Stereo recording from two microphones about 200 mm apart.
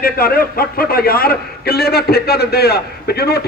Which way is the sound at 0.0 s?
50° left (ahead or behind).